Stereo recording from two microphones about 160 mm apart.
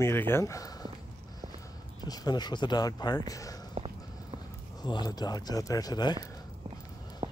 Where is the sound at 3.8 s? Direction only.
35° right (ahead or behind).